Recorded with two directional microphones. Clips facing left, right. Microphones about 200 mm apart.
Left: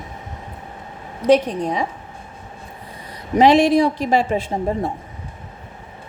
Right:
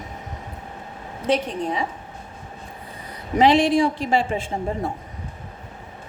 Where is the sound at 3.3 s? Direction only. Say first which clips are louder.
Left 3 dB; 40° left (ahead or behind).